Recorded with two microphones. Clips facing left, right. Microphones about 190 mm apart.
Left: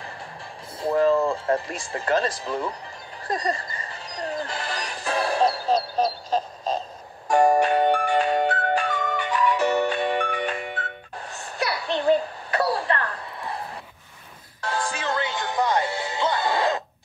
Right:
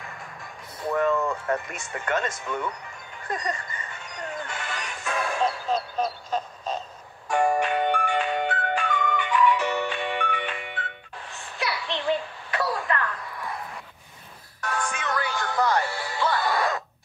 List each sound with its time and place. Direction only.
0.7 s speech: 30° left (ahead or behind)
3.3 s music: 35° left (ahead or behind)